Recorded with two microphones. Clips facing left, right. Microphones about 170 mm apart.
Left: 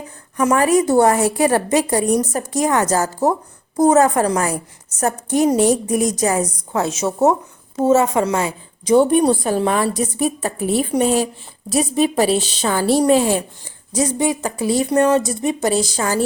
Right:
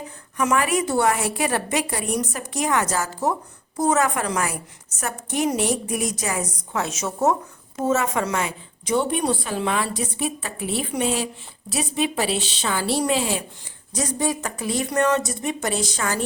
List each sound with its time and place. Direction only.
0.3 s a woman's voice: 40° left (ahead or behind)
13.9 s a woman's voice: 25° left (ahead or behind)